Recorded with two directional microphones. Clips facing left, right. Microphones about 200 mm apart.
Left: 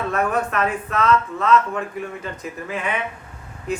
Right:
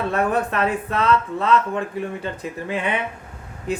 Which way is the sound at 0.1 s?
30° right (ahead or behind).